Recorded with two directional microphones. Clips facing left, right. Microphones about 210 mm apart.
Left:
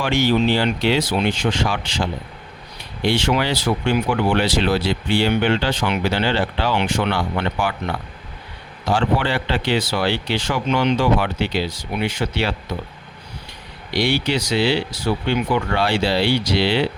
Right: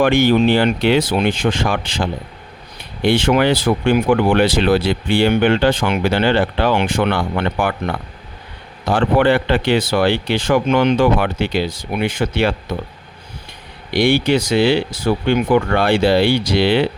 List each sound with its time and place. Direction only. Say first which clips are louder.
0.0 s speech: right 5 dB; 55° right (ahead or behind)
8.9 s speech: right 6 dB; 55° right (ahead or behind)
13.9 s speech: right 6 dB; 50° right (ahead or behind)